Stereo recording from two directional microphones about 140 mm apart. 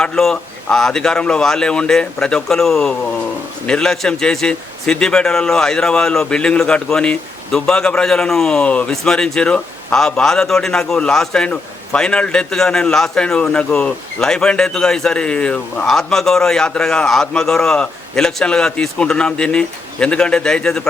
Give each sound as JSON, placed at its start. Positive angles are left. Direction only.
{"t": 0.0, "sound": "a man's voice", "side_deg": 5}